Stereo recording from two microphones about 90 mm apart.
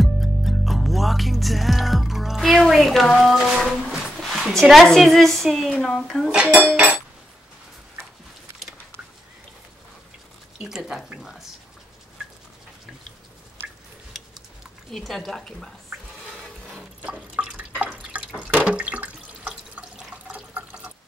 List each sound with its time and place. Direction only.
0.0 s music: centre (ahead or behind)
3.9 s a woman's voice: centre (ahead or behind)
6.3 s speech: 15° right (ahead or behind)
10.6 s a woman's voice: 5° right (ahead or behind)
14.9 s a woman's voice: 5° left (ahead or behind)
18.1 s drip: 15° right (ahead or behind)
18.5 s water: 15° right (ahead or behind)